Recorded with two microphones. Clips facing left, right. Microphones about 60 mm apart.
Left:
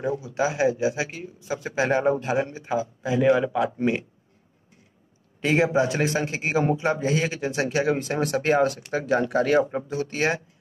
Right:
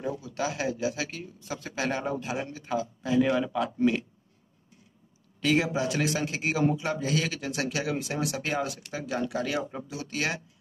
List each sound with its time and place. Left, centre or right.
0.2 s a man's voice: left
3.7 s a man's voice: left
5.4 s a man's voice: left